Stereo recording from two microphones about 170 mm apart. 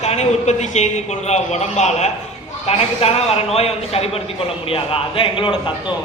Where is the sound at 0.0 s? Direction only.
40° left (ahead or behind).